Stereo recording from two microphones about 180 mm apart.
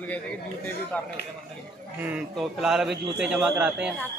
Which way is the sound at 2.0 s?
5° right (ahead or behind).